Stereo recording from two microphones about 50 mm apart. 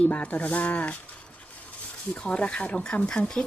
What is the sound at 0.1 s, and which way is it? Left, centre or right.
Speech, left.